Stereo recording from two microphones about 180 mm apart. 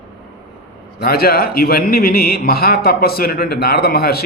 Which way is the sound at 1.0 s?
60° left (ahead or behind).